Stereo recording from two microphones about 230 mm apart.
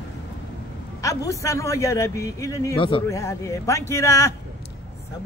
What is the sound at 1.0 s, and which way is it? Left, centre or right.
A man's voice, centre.